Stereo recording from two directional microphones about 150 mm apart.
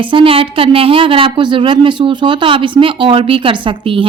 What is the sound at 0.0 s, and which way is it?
Speech, 35° right (ahead or behind).